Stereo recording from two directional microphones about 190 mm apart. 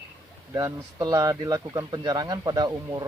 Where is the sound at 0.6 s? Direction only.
20° right (ahead or behind).